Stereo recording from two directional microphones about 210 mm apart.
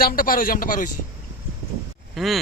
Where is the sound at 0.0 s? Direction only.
45° left (ahead or behind).